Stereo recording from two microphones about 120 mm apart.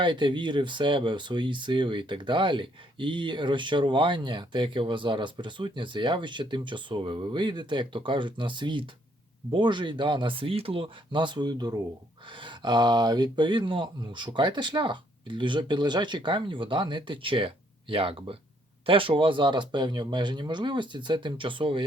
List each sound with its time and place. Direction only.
0.0 s speech: 40° right (ahead or behind)